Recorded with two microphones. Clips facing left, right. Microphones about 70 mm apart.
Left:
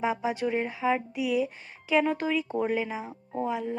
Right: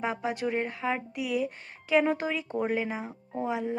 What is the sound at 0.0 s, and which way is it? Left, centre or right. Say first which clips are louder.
Speech: left 2 dB; centre.